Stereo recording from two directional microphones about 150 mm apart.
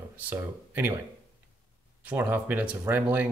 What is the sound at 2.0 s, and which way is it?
Speech, 15° right (ahead or behind).